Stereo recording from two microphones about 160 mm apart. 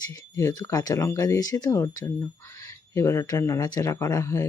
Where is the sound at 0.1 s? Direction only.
20° left (ahead or behind).